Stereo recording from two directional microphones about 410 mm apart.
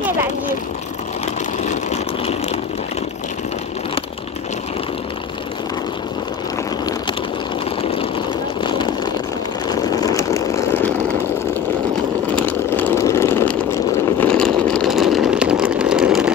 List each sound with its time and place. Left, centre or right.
1.7 s vehicle: centre
8.6 s vehicle: centre
12.4 s vehicle: centre